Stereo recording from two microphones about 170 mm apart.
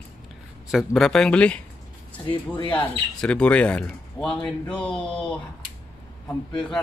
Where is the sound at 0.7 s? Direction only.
Centre (ahead or behind).